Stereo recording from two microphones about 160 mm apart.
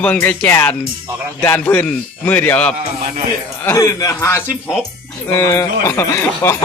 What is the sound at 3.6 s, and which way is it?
Speech, 20° left (ahead or behind).